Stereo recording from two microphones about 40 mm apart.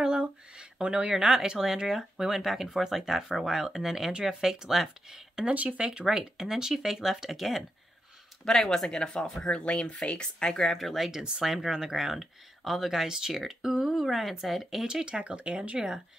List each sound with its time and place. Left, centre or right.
0.6 s a sound: right
1.1 s speech: centre
5.5 s speech: right
5.8 s speech: right
6.0 s speech: centre
8.5 s speech: centre
9.5 s speech: left
10.7 s speech: centre
11.1 s speech: centre
15.0 s speech: right